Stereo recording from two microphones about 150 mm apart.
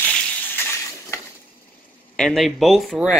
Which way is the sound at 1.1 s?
20° left (ahead or behind).